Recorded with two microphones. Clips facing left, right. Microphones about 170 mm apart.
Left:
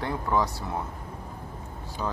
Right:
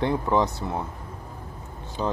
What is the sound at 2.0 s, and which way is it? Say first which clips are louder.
Speech: right 5 dB; 20° right (ahead or behind).